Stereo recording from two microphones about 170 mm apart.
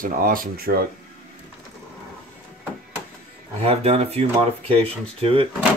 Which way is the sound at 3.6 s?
35° right (ahead or behind).